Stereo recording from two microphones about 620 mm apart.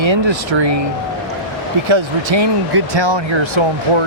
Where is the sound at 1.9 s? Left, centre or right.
Right.